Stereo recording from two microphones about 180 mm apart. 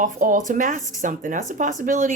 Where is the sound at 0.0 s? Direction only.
45° right (ahead or behind).